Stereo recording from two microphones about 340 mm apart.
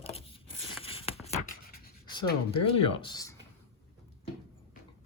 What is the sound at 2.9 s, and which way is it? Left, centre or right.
Speech, centre.